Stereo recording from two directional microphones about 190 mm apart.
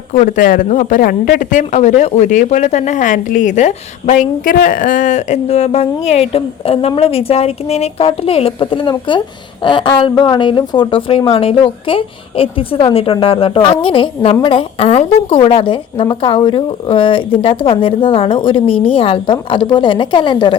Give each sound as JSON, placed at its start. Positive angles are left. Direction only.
{"t": 0.1, "sound": "a woman's voice", "side_deg": 45}